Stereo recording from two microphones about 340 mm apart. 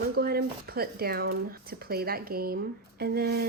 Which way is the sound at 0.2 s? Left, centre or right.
Right.